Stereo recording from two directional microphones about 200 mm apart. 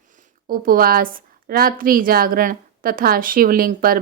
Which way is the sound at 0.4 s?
45° right (ahead or behind).